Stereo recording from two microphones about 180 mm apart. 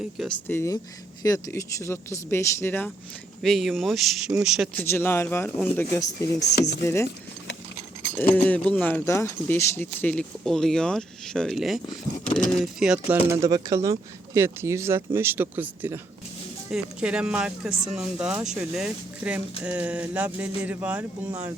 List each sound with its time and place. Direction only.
0.2 s speech: 5° left (ahead or behind)
3.4 s speech: centre (ahead or behind)
4.7 s speech: 10° left (ahead or behind)
6.1 s chopping: 65° left (ahead or behind)
6.8 s speech: 15° left (ahead or behind)
8.1 s speech: 10° left (ahead or behind)
13.1 s speech: 15° right (ahead or behind)